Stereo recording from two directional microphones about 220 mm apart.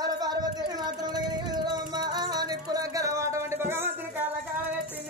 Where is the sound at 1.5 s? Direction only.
20° right (ahead or behind).